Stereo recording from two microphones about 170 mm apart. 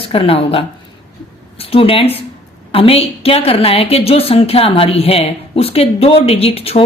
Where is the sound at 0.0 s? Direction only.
35° left (ahead or behind).